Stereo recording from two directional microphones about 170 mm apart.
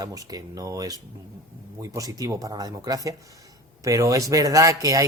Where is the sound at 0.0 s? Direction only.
20° right (ahead or behind).